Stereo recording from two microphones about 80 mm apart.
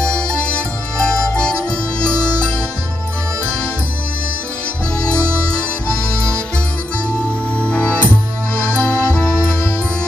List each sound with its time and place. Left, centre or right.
0.0 s music: centre
7.6 s music: centre
8.7 s accordion: centre